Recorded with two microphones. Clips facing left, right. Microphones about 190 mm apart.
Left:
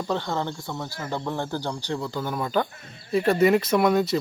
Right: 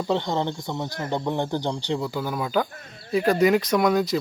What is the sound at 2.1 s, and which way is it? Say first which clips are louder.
Speech: left 2 dB; 5° right (ahead or behind).